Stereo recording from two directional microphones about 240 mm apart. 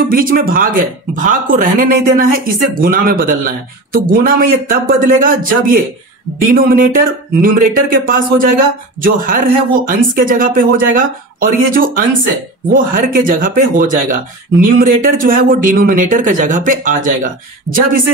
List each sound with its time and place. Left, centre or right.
0.1 s speech: right